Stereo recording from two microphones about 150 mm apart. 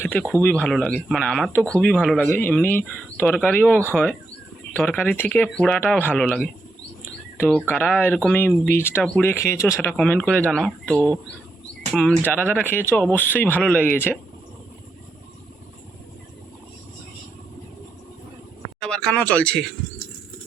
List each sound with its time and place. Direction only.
0.0 s a sound: 10° left (ahead or behind)
0.4 s speech: 5° left (ahead or behind)
7.0 s chirp: 15° left (ahead or behind)
7.7 s speech: 10° left (ahead or behind)
10.0 s speech: 5° left (ahead or behind)
12.3 s speech: 10° left (ahead or behind)
18.8 s speech: 5° left (ahead or behind)